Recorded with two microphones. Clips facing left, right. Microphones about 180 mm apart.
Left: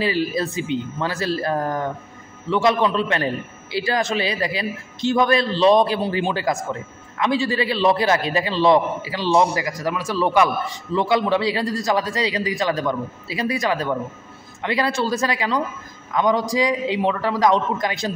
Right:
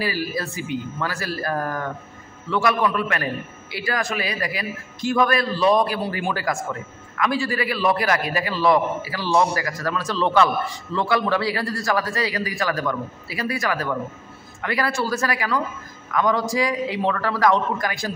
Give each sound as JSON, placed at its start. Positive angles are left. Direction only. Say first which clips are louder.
{"t": 0.0, "sound": "a man's voice", "louder": "left 4 dB", "side_deg": 25}